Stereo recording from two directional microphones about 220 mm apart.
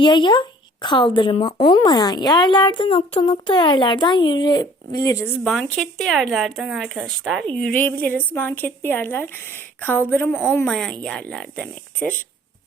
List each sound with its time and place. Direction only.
0.0 s speech: 20° left (ahead or behind)